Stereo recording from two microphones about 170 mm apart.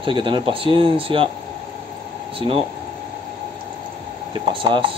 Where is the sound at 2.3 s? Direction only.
30° right (ahead or behind).